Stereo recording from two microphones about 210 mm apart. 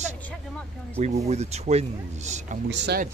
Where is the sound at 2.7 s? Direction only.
50° right (ahead or behind).